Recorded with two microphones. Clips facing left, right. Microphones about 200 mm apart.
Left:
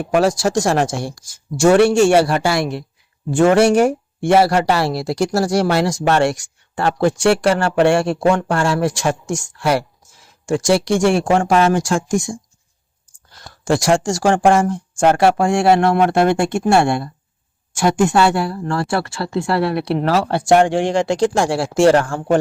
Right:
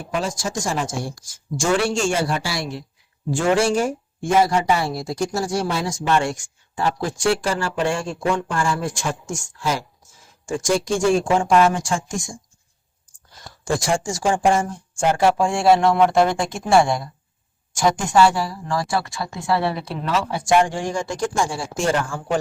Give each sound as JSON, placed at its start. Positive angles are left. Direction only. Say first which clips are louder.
{"t": 0.0, "sound": "a man's voice", "louder": "left 10 dB", "side_deg": 70}
{"t": 13.7, "sound": "speech", "louder": "left 6 dB", "side_deg": 75}